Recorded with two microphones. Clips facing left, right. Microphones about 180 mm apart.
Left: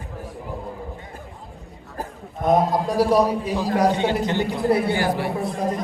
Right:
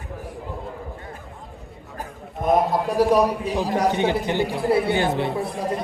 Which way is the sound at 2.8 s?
10° right (ahead or behind).